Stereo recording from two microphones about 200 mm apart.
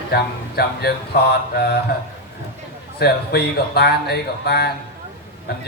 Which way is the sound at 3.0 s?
55° left (ahead or behind).